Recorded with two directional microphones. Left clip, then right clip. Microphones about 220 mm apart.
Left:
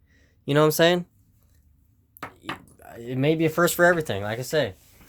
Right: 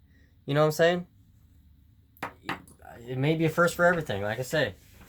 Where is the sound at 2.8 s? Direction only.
55° left (ahead or behind).